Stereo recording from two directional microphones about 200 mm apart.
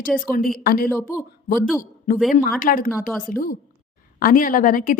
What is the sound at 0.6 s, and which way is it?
Speech, 50° left (ahead or behind).